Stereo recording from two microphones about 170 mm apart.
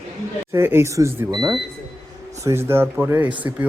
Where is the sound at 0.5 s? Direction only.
15° right (ahead or behind).